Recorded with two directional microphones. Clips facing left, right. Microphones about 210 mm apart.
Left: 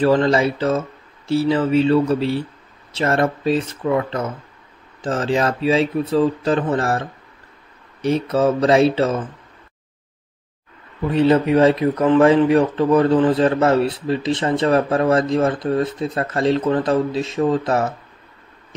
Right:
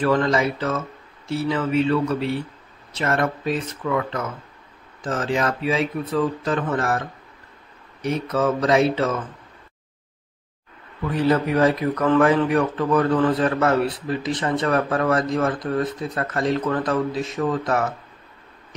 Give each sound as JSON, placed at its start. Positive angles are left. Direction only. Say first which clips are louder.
{"t": 0.0, "sound": "speech", "louder": "left 4 dB", "side_deg": 30}
{"t": 8.0, "sound": "speech", "louder": "left 5 dB", "side_deg": 30}
{"t": 11.0, "sound": "speech", "louder": "left 5 dB", "side_deg": 25}